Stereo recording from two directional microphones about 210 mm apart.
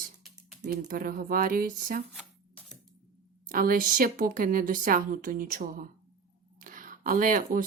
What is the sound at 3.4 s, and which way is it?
Speech, 40° right (ahead or behind).